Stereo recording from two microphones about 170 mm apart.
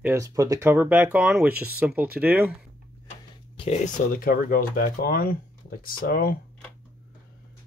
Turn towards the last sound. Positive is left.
turn(degrees=60)  # may be behind; listen again after turning